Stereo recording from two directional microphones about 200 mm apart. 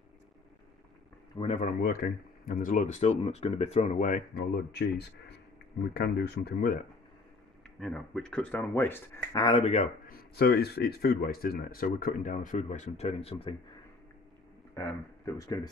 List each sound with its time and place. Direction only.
1.6 s speech: 45° left (ahead or behind)
7.8 s speech: 5° left (ahead or behind); by 9.8 s 30° left (ahead or behind)
10.0 s speech: 50° left (ahead or behind); by 13.6 s 30° left (ahead or behind)
14.7 s speech: 10° left (ahead or behind)